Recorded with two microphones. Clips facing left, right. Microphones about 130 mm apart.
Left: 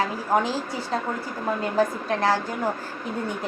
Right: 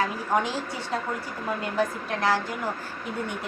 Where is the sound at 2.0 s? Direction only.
40° left (ahead or behind).